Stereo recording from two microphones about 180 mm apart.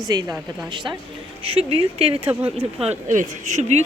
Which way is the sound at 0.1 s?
20° right (ahead or behind).